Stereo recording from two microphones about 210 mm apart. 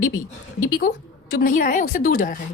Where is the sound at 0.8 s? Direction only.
40° left (ahead or behind).